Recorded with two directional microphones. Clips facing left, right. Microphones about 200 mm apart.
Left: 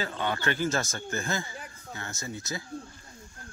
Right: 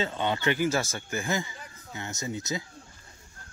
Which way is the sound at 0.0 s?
20° right (ahead or behind).